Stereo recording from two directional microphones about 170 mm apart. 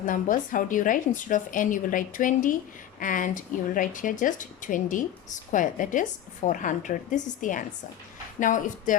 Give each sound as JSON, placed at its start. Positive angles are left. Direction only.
{"t": 0.0, "sound": "a woman's voice", "side_deg": 50}